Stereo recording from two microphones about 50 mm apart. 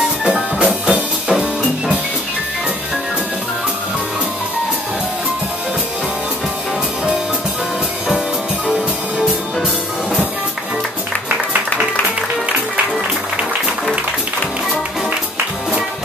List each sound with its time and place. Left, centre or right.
0.2 s music: centre